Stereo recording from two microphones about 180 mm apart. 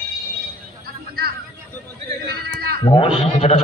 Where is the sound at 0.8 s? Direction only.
60° right (ahead or behind).